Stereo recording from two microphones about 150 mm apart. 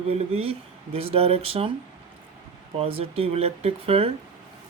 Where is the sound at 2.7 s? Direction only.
40° right (ahead or behind).